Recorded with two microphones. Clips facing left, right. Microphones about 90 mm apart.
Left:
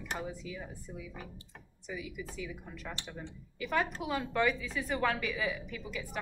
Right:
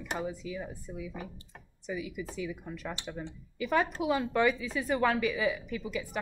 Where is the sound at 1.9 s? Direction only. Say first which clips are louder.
Right 5 dB; 15° right (ahead or behind).